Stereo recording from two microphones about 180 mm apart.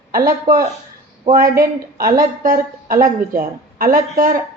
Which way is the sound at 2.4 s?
50° right (ahead or behind).